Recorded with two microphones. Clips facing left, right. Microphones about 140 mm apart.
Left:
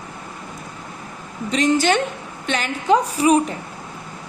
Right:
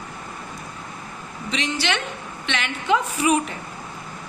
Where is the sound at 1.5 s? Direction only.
45° left (ahead or behind).